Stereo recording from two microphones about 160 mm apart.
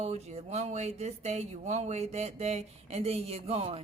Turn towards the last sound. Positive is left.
turn(degrees=-40)  # may be behind; listen again after turning